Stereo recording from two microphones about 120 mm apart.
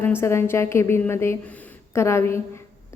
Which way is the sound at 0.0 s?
20° left (ahead or behind).